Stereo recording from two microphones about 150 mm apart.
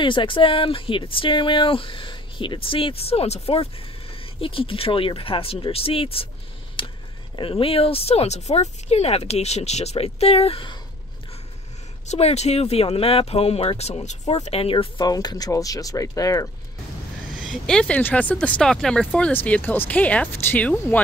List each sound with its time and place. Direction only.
0.0 s speech: 35° left (ahead or behind)
6.8 s a sound: 35° left (ahead or behind)
7.3 s speech: 35° left (ahead or behind)
12.1 s speech: 45° left (ahead or behind); by 16.4 s 20° left (ahead or behind)
17.4 s speech: 5° left (ahead or behind)